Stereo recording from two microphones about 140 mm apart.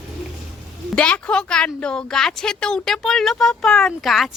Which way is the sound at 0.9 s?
10° left (ahead or behind).